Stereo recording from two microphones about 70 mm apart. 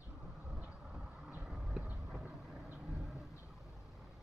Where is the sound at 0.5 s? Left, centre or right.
Centre.